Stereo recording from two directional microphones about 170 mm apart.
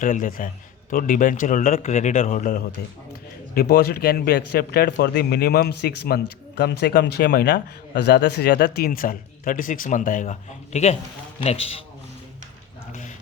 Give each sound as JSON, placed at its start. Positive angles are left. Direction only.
{"t": 0.0, "sound": "a man's voice", "side_deg": 50}